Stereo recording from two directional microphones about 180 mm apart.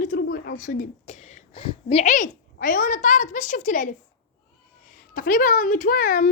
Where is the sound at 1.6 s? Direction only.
30° left (ahead or behind).